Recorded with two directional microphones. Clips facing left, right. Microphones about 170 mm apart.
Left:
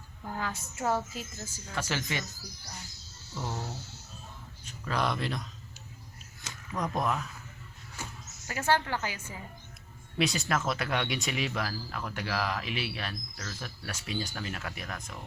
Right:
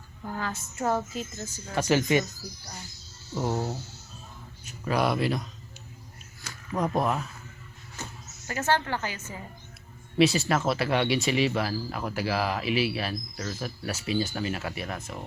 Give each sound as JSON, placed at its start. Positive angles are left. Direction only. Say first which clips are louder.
{"t": 0.3, "sound": "speech", "louder": "right 3 dB", "side_deg": 10}
{"t": 1.7, "sound": "speech", "louder": "right 11 dB", "side_deg": -15}
{"t": 3.3, "sound": "speech", "louder": "right 8 dB", "side_deg": -35}
{"t": 4.6, "sound": "speech", "louder": "right 5 dB", "side_deg": -10}
{"t": 6.7, "sound": "speech", "louder": "right 4 dB", "side_deg": -30}
{"t": 8.0, "sound": "a sound", "louder": "right 2 dB", "side_deg": 10}
{"t": 8.4, "sound": "speech", "louder": "right 2 dB", "side_deg": 10}
{"t": 10.2, "sound": "speech", "louder": "right 7 dB", "side_deg": 0}
{"t": 11.7, "sound": "speech", "louder": "right 6 dB", "side_deg": -15}